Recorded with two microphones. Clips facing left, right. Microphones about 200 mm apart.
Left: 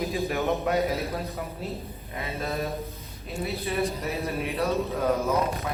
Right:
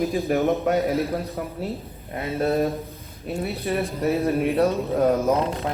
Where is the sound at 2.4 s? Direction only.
55° right (ahead or behind).